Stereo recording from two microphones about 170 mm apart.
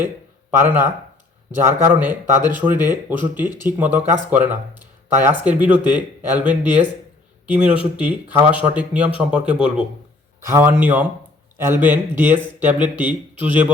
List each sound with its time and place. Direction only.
0.6 s speech: 10° right (ahead or behind)